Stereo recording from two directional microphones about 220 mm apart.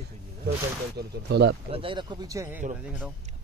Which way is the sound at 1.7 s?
25° right (ahead or behind).